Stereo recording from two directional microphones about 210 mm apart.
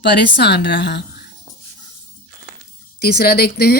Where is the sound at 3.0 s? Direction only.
50° left (ahead or behind).